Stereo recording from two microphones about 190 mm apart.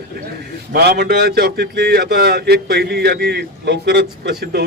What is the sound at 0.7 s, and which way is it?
A man's voice, 55° right (ahead or behind).